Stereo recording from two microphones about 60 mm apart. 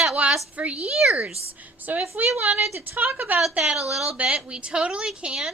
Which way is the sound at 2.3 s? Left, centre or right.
Right.